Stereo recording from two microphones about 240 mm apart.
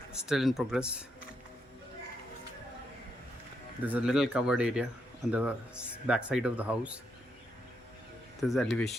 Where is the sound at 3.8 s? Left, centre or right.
Centre.